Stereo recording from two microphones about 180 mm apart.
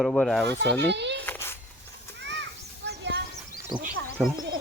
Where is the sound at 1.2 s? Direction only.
10° left (ahead or behind).